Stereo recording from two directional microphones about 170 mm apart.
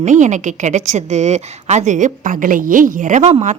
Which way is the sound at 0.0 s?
45° right (ahead or behind).